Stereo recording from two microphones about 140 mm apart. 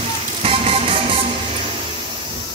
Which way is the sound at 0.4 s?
45° right (ahead or behind).